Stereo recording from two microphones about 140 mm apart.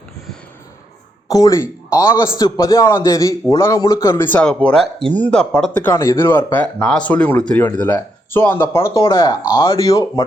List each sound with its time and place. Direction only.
1.3 s a man's voice: 25° left (ahead or behind)